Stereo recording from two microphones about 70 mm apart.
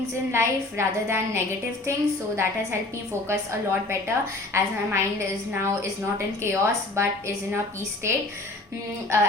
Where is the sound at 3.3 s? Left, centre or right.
Right.